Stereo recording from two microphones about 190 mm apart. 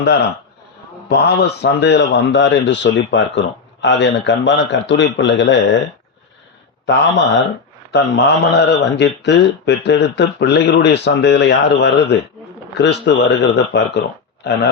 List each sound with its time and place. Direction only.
0.0 s a man's voice: 60° left (ahead or behind)
6.8 s a man's voice: 65° left (ahead or behind)